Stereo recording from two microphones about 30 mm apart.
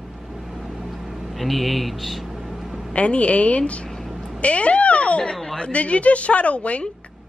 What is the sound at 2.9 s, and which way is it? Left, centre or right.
A woman's voice, left.